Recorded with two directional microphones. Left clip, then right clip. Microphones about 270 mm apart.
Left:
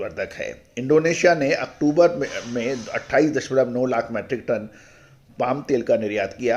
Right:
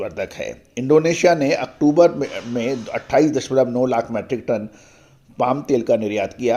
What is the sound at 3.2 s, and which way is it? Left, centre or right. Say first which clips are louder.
Speech: right 3 dB; centre.